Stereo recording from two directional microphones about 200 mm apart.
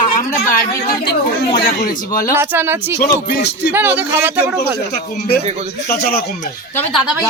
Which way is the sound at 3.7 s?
10° right (ahead or behind).